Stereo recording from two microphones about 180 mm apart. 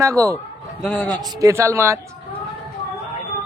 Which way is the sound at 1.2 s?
15° right (ahead or behind).